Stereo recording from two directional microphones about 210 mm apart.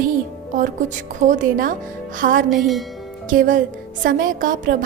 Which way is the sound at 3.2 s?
40° right (ahead or behind).